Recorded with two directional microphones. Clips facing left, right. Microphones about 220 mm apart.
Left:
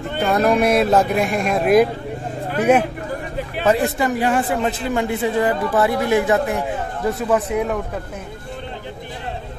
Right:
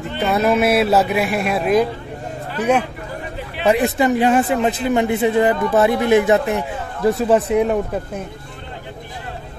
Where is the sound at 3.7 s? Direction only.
20° right (ahead or behind).